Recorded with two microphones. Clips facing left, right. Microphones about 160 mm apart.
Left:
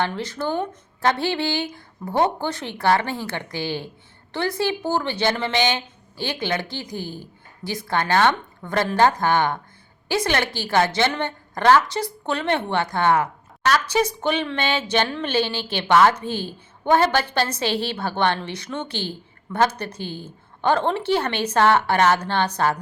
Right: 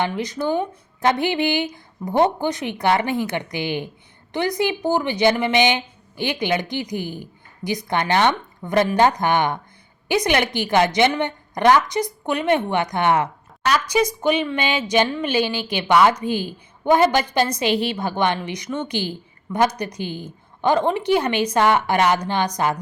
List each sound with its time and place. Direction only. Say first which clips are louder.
0.0 s a woman's voice: right 2 dB; 15° right (ahead or behind)